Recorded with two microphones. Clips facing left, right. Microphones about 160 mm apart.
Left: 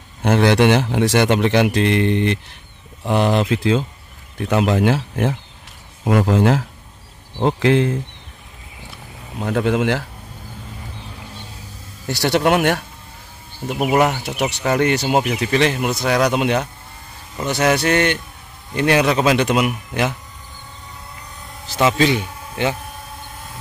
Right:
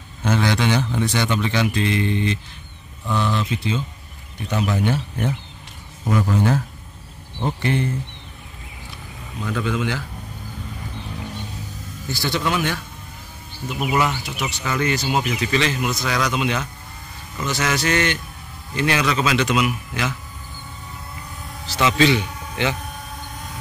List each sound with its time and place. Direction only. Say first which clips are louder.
0.2 s a man's voice: left 6 dB; 65° left (ahead or behind)
3.1 s speech: left 6 dB; 80° left
9.4 s a man's voice: left 6 dB; 65° left (ahead or behind)
12.1 s a man's voice: left 7 dB; 70° left (ahead or behind); by 20.2 s 55° left (ahead or behind)
21.7 s a man's voice: left 1 dB; 45° left (ahead or behind)